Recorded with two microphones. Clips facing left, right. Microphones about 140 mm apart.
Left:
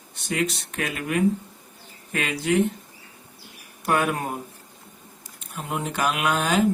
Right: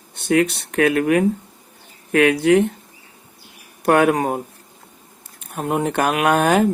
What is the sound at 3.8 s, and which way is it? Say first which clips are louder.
Speech: right 8 dB; 65° right (ahead or behind).